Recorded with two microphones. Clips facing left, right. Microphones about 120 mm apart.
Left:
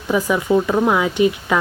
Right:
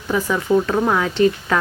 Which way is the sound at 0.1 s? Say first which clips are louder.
Left 1 dB; 10° left (ahead or behind).